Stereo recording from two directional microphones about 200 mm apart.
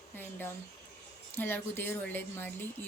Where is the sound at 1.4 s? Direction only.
10° left (ahead or behind).